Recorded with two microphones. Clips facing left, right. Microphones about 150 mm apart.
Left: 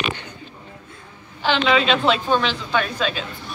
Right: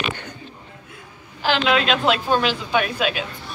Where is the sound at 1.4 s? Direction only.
5° right (ahead or behind).